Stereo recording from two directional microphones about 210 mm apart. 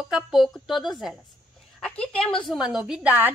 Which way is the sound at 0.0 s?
Centre (ahead or behind).